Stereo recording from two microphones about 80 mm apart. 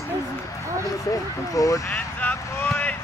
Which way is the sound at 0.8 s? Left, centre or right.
Left.